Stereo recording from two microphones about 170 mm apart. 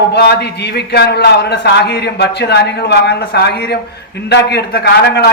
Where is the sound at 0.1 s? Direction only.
75° left (ahead or behind).